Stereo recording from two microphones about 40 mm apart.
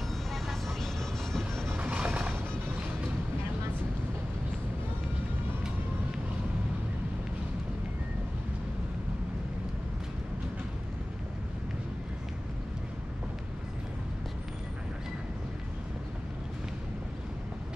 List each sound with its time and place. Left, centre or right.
0.3 s vehicle: centre
1.3 s music: centre
1.8 s music: right